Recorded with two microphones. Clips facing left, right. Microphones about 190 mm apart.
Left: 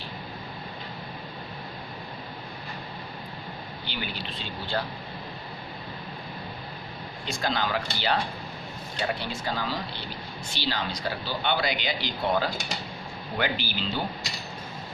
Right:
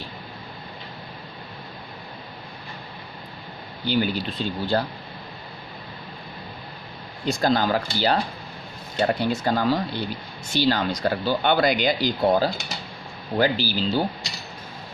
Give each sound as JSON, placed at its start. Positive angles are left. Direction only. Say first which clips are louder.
{"t": 3.8, "sound": "speech", "louder": "right 13 dB", "side_deg": -40}
{"t": 7.3, "sound": "speech", "louder": "right 8 dB", "side_deg": -40}